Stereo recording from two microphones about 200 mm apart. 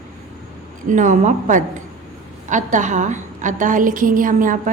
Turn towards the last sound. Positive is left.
turn(degrees=-40)  # may be behind; listen again after turning